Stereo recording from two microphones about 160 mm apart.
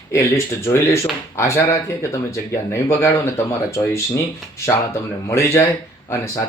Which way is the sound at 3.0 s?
15° left (ahead or behind).